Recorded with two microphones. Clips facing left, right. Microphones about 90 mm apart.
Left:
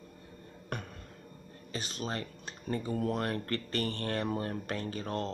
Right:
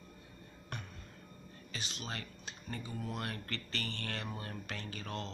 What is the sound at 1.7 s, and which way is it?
Speech, 40° left (ahead or behind).